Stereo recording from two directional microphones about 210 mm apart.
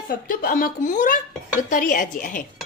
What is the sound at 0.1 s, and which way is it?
A woman's voice, 40° left (ahead or behind).